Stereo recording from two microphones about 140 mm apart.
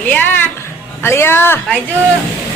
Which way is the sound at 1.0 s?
15° left (ahead or behind).